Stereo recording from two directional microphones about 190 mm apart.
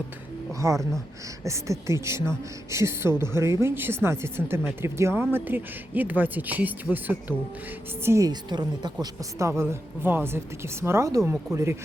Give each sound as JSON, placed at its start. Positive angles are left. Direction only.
{"t": 0.6, "sound": "speech", "side_deg": -15}